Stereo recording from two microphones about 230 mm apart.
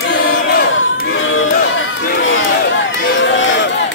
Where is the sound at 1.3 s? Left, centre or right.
Left.